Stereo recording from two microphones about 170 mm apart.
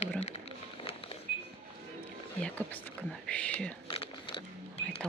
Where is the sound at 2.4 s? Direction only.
10° left (ahead or behind).